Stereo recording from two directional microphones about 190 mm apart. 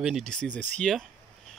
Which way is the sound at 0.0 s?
Centre (ahead or behind).